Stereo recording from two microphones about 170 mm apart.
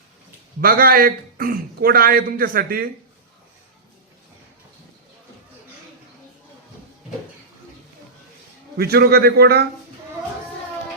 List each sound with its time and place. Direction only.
0.6 s a man's voice: 60° right (ahead or behind)
8.8 s a man's voice: 65° right (ahead or behind)